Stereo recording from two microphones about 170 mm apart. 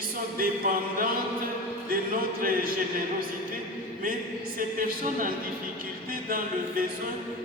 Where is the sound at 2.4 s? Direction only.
60° right (ahead or behind).